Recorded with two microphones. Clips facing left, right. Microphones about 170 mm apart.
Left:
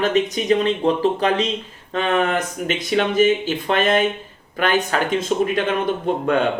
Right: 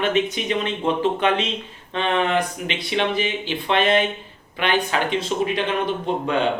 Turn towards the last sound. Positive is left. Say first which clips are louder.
# left 3 dB
turn(degrees=50)  # may be behind; listen again after turning